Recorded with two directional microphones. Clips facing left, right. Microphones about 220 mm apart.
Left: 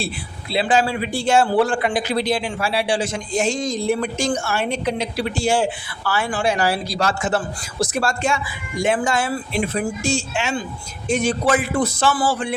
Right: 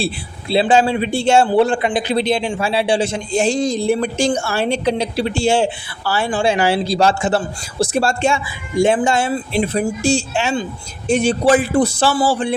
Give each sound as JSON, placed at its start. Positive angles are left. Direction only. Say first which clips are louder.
{"t": 0.5, "sound": "speech", "louder": "right 5 dB", "side_deg": -25}